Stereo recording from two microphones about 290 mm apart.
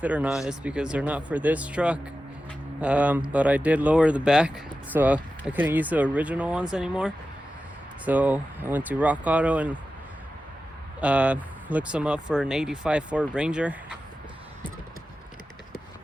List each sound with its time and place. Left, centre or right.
0.0 s speech: centre
11.0 s speech: centre